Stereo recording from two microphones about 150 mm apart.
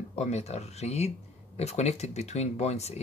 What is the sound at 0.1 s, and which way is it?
Speech, 45° left (ahead or behind).